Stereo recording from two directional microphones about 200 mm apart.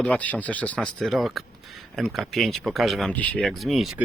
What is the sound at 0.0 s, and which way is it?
Speech, 5° left (ahead or behind).